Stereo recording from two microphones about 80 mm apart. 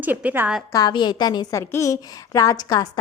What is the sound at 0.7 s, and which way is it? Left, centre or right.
Speech, left.